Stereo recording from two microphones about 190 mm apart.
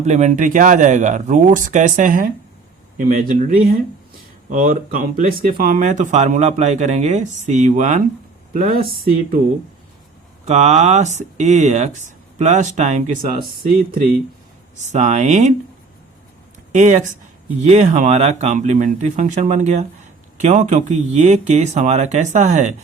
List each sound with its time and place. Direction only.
0.0 s speech: 40° right (ahead or behind)
10.4 s speech: 35° right (ahead or behind)
14.9 s speech: 40° right (ahead or behind)
16.7 s speech: 40° right (ahead or behind)